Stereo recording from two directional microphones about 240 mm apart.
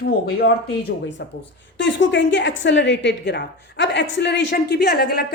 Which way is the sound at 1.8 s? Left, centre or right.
Left.